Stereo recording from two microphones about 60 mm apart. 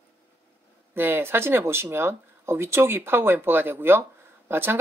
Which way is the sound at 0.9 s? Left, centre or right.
Right.